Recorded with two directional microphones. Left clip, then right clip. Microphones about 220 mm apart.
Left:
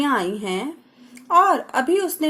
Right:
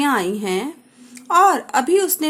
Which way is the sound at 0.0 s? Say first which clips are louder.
Right 2 dB; 20° right (ahead or behind).